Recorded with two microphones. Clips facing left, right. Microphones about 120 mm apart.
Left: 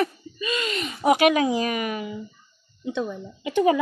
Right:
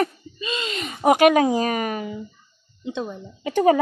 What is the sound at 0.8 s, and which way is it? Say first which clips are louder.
A woman's voice: right 3 dB; 50° right (ahead or behind).